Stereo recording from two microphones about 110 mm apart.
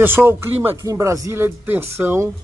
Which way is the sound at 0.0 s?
20° right (ahead or behind).